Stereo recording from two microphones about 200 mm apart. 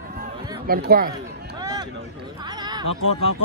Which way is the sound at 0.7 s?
45° right (ahead or behind).